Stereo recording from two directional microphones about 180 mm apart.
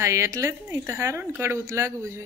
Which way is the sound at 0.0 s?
15° right (ahead or behind).